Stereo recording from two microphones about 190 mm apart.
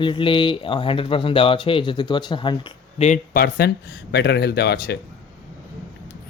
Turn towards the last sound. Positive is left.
turn(degrees=60)  # may be behind; listen again after turning